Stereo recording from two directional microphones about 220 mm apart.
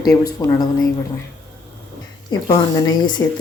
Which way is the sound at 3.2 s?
15° left (ahead or behind).